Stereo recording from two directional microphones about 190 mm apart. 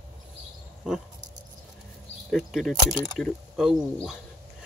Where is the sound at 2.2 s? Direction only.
Centre (ahead or behind).